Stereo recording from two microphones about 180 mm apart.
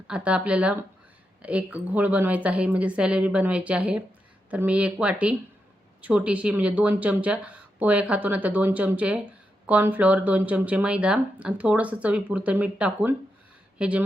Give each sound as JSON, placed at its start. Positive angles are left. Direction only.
{"t": 0.1, "sound": "speech", "side_deg": -5}